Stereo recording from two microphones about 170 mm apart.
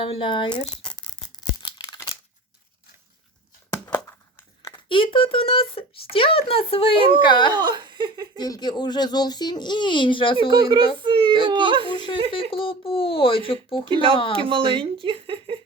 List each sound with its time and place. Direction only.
0.0 s toothbrush: 30° left (ahead or behind)
4.6 s speech: 25° left (ahead or behind)
7.5 s a child's voice: 25° right (ahead or behind)
8.4 s speech: 25° left (ahead or behind)
10.5 s a child's voice: 25° right (ahead or behind)
12.3 s speech: 30° left (ahead or behind)
13.8 s speech: 30° right (ahead or behind)